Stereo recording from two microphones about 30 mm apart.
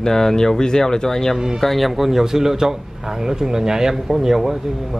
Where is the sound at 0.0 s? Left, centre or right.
Centre.